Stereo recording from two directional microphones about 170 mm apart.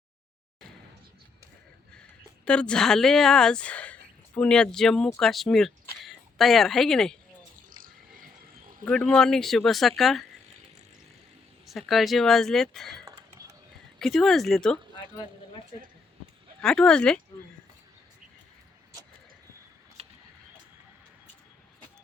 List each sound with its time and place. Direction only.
2.0 s speech: 5° left (ahead or behind)
7.8 s a sound: 55° right (ahead or behind)
8.8 s speech: 5° left (ahead or behind)
11.6 s speech: centre (ahead or behind)
14.0 s speech: centre (ahead or behind)
16.6 s speech: 5° left (ahead or behind)
20.0 s a sound: 35° right (ahead or behind)